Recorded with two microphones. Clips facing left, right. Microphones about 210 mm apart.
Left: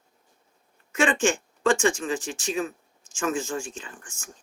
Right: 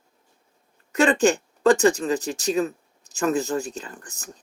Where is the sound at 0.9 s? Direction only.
40° right (ahead or behind).